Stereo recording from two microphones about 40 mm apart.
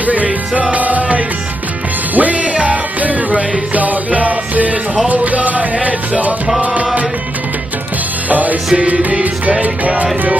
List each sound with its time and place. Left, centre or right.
0.0 s music: right
5.0 s speech: right
5.8 s music: right
8.3 s music: right
8.7 s music: right
9.6 s music: right